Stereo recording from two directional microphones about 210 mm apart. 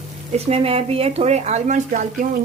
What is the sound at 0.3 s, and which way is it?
Speech, 30° right (ahead or behind).